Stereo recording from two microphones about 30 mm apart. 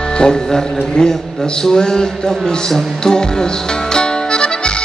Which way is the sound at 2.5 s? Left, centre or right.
Left.